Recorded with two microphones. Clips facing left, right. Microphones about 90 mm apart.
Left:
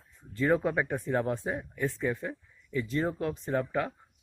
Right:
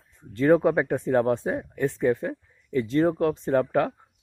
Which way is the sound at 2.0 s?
45° right (ahead or behind).